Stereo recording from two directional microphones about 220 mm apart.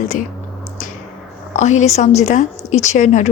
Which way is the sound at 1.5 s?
30° left (ahead or behind).